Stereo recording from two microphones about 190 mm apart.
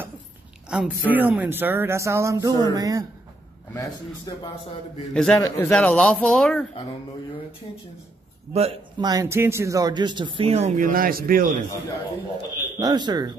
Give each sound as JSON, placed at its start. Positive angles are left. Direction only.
{"t": 0.7, "sound": "speech", "side_deg": -5}
{"t": 4.3, "sound": "speech", "side_deg": 20}
{"t": 5.1, "sound": "speech", "side_deg": 5}
{"t": 8.5, "sound": "speech", "side_deg": -30}
{"t": 12.7, "sound": "speech", "side_deg": -20}